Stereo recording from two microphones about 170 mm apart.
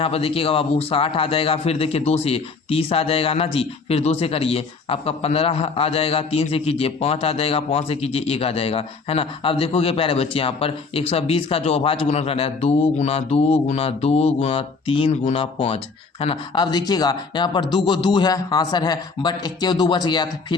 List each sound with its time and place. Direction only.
0.0 s a man's voice: 35° left (ahead or behind)